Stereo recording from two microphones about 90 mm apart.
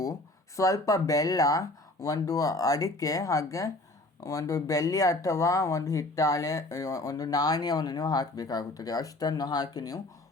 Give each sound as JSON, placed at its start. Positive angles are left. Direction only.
{"t": 0.0, "sound": "speech", "side_deg": 35}